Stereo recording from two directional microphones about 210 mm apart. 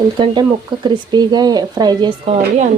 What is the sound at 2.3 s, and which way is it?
Speech, 35° right (ahead or behind).